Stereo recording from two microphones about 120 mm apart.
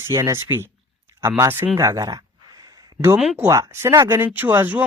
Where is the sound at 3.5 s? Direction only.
25° right (ahead or behind).